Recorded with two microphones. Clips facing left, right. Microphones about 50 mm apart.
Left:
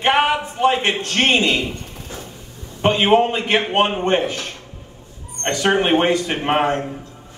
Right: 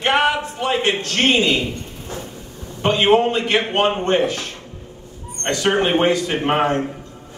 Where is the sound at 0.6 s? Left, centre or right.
Left.